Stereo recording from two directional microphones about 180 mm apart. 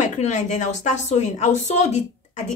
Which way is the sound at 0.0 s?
40° left (ahead or behind).